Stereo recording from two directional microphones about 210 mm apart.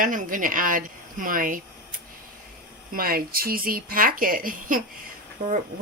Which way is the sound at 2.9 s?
45° right (ahead or behind).